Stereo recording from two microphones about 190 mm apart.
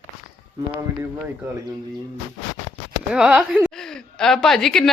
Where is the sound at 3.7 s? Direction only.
5° left (ahead or behind).